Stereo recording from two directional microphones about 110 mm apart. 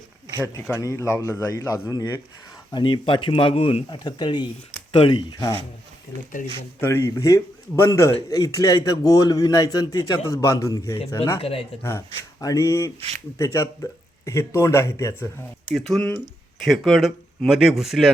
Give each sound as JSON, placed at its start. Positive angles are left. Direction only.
{"t": 0.7, "sound": "a man's voice", "side_deg": 30}
{"t": 2.7, "sound": "speech", "side_deg": 50}
{"t": 4.9, "sound": "speech", "side_deg": 55}
{"t": 6.1, "sound": "speech", "side_deg": -90}
{"t": 6.6, "sound": "a man's voice", "side_deg": 20}
{"t": 11.3, "sound": "speech", "side_deg": 55}
{"t": 11.8, "sound": "a man's voice", "side_deg": 20}
{"t": 15.7, "sound": "speech", "side_deg": 0}